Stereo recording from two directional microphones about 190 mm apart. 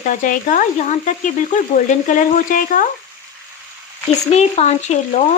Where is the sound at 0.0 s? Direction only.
45° left (ahead or behind).